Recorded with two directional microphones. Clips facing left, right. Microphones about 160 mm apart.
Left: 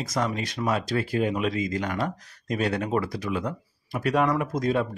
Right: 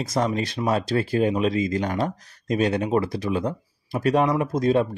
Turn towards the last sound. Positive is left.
turn(degrees=-25)  # may be behind; listen again after turning